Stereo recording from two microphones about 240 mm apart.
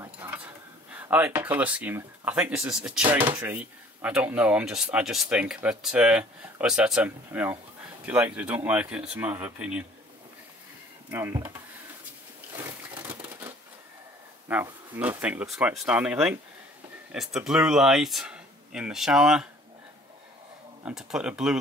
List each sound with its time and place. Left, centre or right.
0.0 s a sound: centre
0.9 s speech: centre
11.1 s speech: centre
12.5 s a sound: centre
14.5 s speech: centre
20.8 s speech: centre